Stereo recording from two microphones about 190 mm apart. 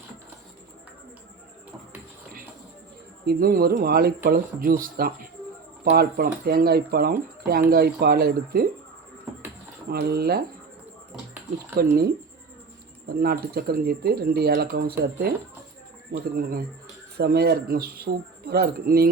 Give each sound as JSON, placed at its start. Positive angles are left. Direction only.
{"t": 3.2, "sound": "speech", "side_deg": -50}
{"t": 9.9, "sound": "speech", "side_deg": -55}
{"t": 11.8, "sound": "speech", "side_deg": -55}
{"t": 13.1, "sound": "speech", "side_deg": -55}
{"t": 17.2, "sound": "speech", "side_deg": -55}